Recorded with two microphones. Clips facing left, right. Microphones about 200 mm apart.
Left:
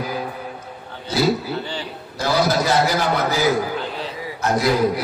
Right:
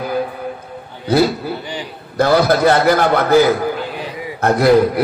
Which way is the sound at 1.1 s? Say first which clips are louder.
Right 5 dB; 60° right (ahead or behind).